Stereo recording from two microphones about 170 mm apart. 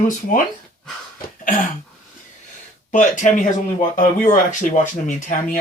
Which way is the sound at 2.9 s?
50° left (ahead or behind).